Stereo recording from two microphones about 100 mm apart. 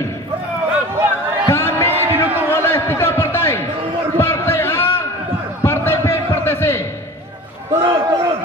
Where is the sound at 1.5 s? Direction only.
25° left (ahead or behind).